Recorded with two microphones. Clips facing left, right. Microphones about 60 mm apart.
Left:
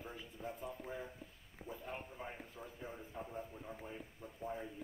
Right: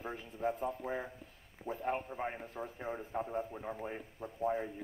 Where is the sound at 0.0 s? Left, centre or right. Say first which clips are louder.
Right 10 dB; right.